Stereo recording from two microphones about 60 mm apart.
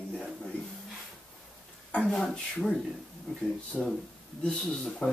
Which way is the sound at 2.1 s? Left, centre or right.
Centre.